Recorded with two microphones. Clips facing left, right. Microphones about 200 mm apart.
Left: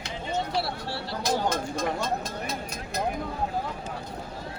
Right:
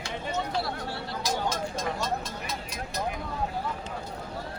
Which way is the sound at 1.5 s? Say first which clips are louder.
Left 3 dB; 55° left (ahead or behind).